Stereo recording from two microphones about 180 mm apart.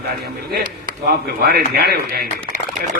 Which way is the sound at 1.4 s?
60° right (ahead or behind).